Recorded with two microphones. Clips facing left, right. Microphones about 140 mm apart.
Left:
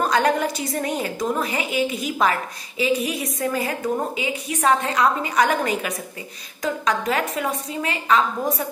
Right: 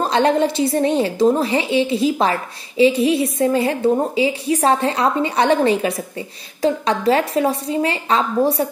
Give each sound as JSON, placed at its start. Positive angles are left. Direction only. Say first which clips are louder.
{"t": 0.0, "sound": "a woman's voice", "louder": "right 4 dB", "side_deg": -25}